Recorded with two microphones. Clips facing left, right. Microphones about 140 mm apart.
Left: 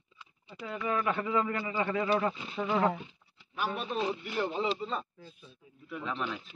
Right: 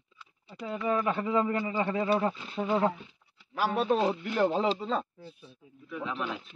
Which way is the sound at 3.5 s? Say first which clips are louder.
Right 7 dB; 90° right.